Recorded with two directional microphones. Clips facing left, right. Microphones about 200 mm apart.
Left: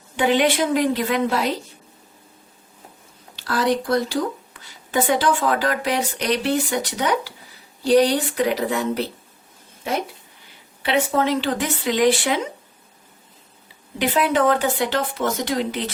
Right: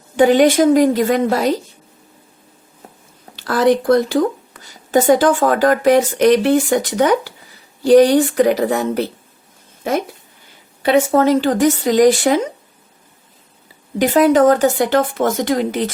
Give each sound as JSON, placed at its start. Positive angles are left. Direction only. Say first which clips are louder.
{"t": 0.2, "sound": "speech", "louder": "right 8 dB", "side_deg": -45}
{"t": 3.3, "sound": "speech", "louder": "right 7 dB", "side_deg": -50}
{"t": 10.8, "sound": "speech", "louder": "right 7 dB", "side_deg": -45}
{"t": 14.0, "sound": "speech", "louder": "right 8 dB", "side_deg": -45}